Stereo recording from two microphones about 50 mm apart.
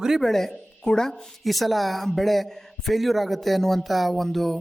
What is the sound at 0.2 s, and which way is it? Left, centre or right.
A man's voice, centre.